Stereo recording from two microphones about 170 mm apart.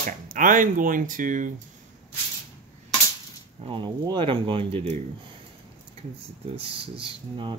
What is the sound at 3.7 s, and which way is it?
Speech, 25° right (ahead or behind).